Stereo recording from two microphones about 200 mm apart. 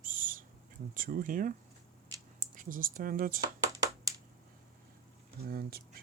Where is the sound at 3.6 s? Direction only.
15° right (ahead or behind).